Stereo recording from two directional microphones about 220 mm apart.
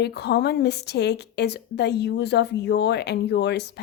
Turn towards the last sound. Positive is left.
turn(degrees=50)  # may be behind; listen again after turning